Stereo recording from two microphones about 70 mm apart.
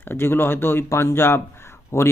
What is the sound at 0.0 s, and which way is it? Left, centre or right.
Speech, left.